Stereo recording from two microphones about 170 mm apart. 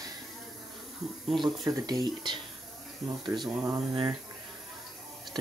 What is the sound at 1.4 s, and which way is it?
Speech, 20° right (ahead or behind).